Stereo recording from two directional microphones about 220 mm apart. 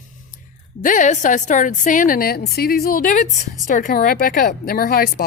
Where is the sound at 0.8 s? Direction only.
35° left (ahead or behind).